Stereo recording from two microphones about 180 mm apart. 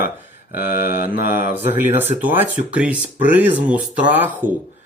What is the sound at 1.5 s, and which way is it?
Speech, 10° right (ahead or behind).